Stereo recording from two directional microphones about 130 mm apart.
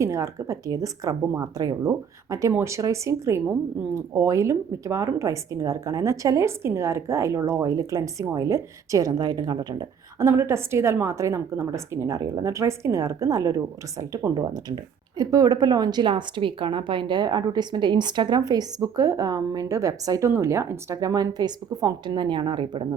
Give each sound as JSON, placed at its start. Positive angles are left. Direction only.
{"t": 0.0, "sound": "speech", "side_deg": -25}
{"t": 10.2, "sound": "a woman's voice", "side_deg": -20}